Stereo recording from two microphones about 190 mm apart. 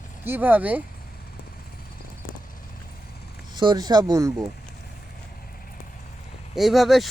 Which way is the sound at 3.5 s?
20° right (ahead or behind).